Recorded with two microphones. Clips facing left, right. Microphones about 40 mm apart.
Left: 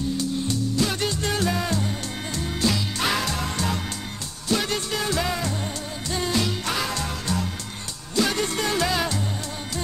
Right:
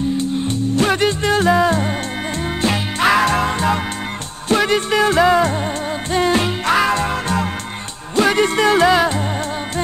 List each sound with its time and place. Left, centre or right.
0.2 s music: right
2.6 s music: right
8.9 s music: right